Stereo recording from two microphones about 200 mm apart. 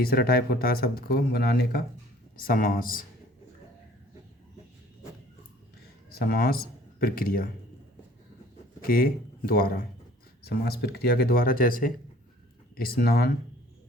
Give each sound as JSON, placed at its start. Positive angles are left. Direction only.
{"t": 0.0, "sound": "speech", "side_deg": 50}
{"t": 6.1, "sound": "speech", "side_deg": 45}
{"t": 8.8, "sound": "speech", "side_deg": 45}